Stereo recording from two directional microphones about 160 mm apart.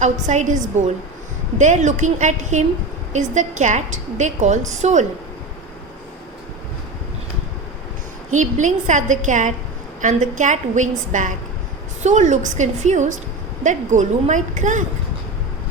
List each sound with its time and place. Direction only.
0.0 s a woman's voice: 50° right (ahead or behind)
8.3 s a woman's voice: 50° right (ahead or behind)